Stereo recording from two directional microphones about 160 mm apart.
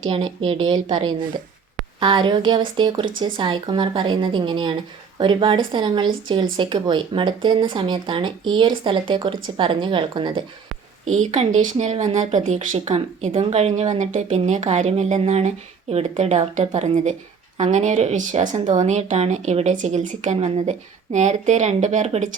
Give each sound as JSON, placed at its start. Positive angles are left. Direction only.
{"t": 0.1, "sound": "speech", "side_deg": -35}
{"t": 11.2, "sound": "speech", "side_deg": -50}